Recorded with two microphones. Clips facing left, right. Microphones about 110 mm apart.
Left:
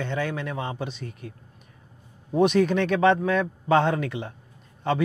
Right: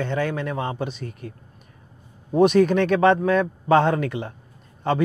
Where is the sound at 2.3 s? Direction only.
45° right (ahead or behind).